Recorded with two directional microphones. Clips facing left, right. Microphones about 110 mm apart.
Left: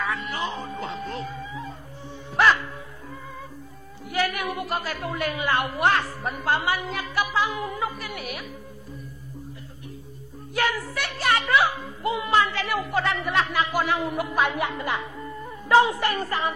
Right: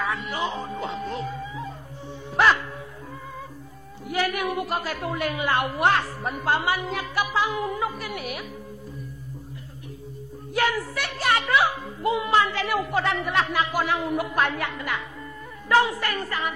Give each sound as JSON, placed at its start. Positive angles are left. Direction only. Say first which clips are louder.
{"t": 0.0, "sound": "music", "louder": "right 1 dB", "side_deg": -10}
{"t": 4.1, "sound": "a woman's voice", "louder": "right 1 dB", "side_deg": -10}
{"t": 10.5, "sound": "speech", "louder": "right 1 dB", "side_deg": -10}
{"t": 14.5, "sound": "speech", "louder": "left 2 dB", "side_deg": 20}